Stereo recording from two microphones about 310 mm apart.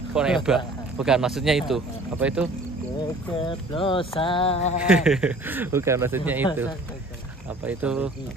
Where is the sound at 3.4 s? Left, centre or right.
Centre.